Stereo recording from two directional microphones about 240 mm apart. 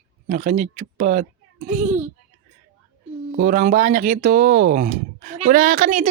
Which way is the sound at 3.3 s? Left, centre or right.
Right.